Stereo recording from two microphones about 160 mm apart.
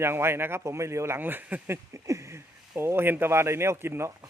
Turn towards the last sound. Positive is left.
turn(degrees=-15)  # may be behind; listen again after turning